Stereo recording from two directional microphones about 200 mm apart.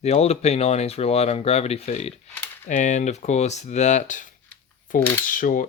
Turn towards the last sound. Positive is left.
turn(degrees=40)  # may be behind; listen again after turning